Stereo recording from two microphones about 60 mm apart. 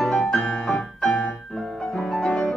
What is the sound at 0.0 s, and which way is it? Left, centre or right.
Music, centre.